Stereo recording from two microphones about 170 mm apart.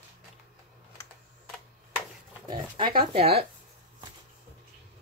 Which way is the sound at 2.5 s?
30° right (ahead or behind).